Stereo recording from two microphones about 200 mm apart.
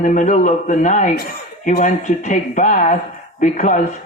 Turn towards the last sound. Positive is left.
turn(degrees=35)  # may be behind; listen again after turning